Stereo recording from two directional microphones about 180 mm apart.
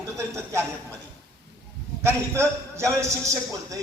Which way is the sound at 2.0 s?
15° right (ahead or behind).